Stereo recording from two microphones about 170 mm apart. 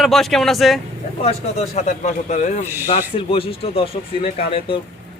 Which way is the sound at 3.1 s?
35° left (ahead or behind).